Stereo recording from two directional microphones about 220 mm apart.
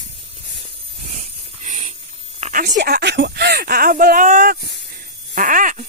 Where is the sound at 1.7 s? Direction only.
30° right (ahead or behind).